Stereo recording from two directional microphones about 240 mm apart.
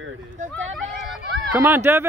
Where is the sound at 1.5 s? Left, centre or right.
Centre.